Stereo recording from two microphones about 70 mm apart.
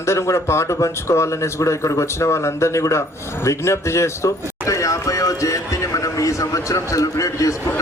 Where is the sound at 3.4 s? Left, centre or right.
Left.